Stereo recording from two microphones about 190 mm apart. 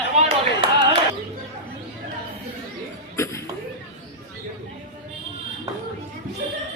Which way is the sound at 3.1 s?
15° left (ahead or behind).